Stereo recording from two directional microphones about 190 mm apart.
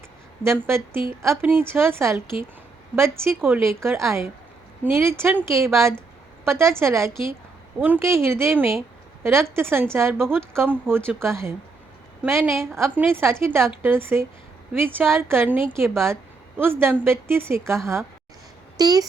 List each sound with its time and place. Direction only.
0.4 s speech: 15° right (ahead or behind)